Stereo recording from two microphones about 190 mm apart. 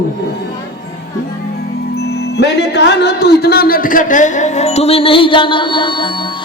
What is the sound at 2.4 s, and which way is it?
A man's voice, 65° left (ahead or behind).